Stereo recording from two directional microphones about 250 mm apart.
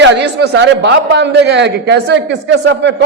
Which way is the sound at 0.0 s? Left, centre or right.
Right.